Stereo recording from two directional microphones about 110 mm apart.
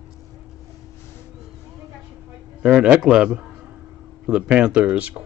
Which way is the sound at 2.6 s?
10° right (ahead or behind).